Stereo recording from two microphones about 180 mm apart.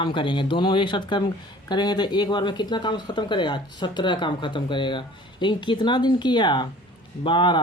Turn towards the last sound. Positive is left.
turn(degrees=25)  # may be behind; listen again after turning